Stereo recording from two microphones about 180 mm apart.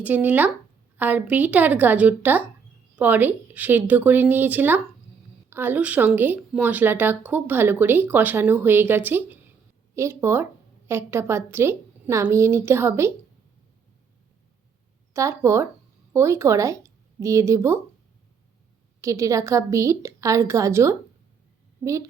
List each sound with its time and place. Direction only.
0.0 s a woman's voice: 10° right (ahead or behind)
15.1 s a woman's voice: 15° right (ahead or behind)
19.0 s speech: 15° right (ahead or behind)